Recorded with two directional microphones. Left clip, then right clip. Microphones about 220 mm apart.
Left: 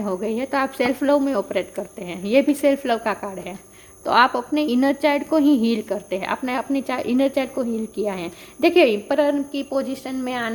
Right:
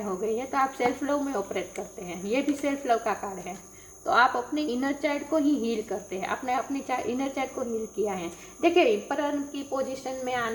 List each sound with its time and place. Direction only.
0.2 s a woman's voice: 50° left (ahead or behind)